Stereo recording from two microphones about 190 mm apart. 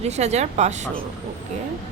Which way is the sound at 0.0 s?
35° right (ahead or behind).